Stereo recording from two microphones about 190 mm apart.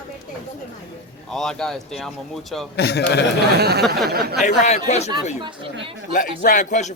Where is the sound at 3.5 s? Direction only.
55° right (ahead or behind).